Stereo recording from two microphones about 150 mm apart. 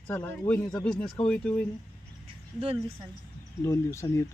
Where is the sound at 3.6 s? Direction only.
20° left (ahead or behind).